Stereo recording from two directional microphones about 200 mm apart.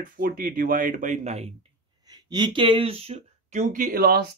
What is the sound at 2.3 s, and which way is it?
Speech, 20° right (ahead or behind).